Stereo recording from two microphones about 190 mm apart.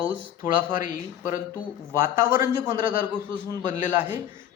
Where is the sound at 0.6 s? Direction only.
45° left (ahead or behind).